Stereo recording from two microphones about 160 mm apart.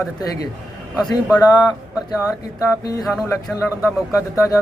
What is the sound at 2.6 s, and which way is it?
A man's voice, 20° left (ahead or behind).